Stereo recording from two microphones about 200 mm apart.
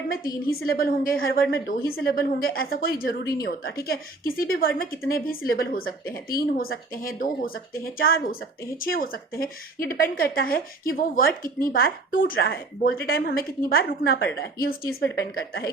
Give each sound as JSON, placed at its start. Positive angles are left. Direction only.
{"t": 0.6, "sound": "a woman's voice", "side_deg": 50}